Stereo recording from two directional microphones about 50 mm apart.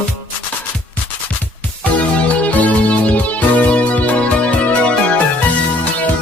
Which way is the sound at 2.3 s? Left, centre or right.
Left.